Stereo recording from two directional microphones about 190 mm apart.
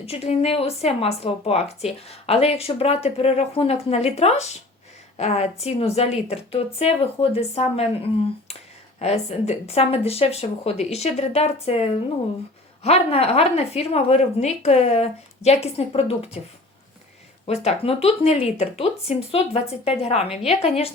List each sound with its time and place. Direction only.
0.0 s speech: 30° left (ahead or behind)
17.4 s speech: 35° left (ahead or behind)